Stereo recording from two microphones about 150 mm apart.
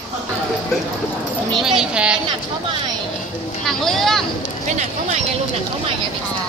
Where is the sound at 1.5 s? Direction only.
Centre (ahead or behind).